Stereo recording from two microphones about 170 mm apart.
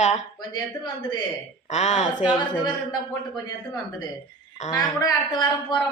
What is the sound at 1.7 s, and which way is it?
Speech, 40° left (ahead or behind).